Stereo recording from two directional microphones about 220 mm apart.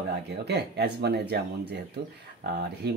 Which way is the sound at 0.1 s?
50° right (ahead or behind).